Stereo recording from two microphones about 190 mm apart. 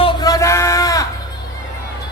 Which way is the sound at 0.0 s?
25° left (ahead or behind).